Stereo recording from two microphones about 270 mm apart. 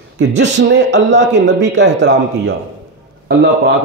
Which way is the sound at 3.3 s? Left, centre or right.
Right.